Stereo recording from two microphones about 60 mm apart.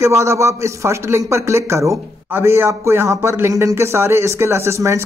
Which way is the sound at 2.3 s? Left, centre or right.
Right.